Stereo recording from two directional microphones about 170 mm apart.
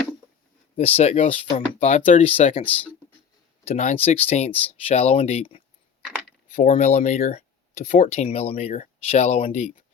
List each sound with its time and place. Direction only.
0.8 s speech: 35° left (ahead or behind)
2.6 s speech: 10° left (ahead or behind)
3.7 s speech: 40° left (ahead or behind)